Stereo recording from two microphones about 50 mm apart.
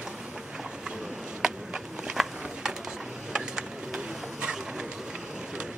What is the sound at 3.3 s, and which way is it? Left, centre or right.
Bird, centre.